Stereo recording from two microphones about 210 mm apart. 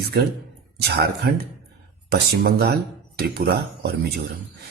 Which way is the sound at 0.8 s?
50° right (ahead or behind).